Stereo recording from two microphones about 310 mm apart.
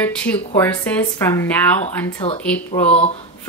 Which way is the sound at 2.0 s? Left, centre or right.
Centre.